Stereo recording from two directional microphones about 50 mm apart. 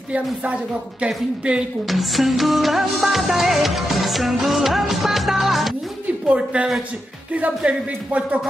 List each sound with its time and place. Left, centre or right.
1.0 s speech: right
1.9 s music: centre
6.2 s speech: right